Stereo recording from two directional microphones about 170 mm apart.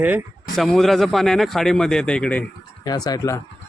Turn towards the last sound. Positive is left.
turn(degrees=20)  # may be behind; listen again after turning